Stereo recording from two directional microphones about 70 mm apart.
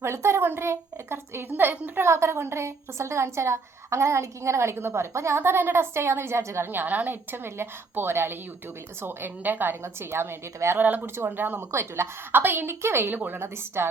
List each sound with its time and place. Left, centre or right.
0.0 s a woman's voice: right
10.8 s speech: right
11.7 s a woman's voice: right